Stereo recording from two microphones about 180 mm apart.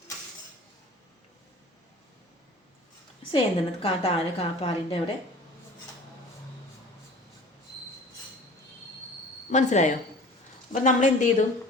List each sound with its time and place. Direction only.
3.3 s a woman's voice: 30° left (ahead or behind)
9.5 s a woman's voice: 40° left (ahead or behind)